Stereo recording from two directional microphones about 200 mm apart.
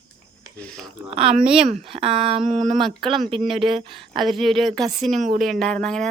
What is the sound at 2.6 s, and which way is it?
Speech, centre (ahead or behind).